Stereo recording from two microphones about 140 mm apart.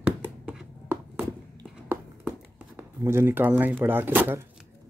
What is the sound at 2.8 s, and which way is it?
Speech, 20° right (ahead or behind).